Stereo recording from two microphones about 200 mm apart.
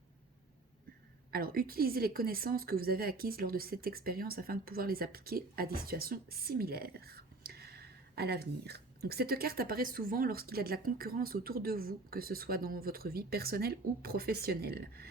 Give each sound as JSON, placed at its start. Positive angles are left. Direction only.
{"t": 1.3, "sound": "a woman's voice", "side_deg": -50}